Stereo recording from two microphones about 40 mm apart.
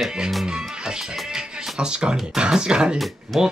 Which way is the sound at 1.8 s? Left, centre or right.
Right.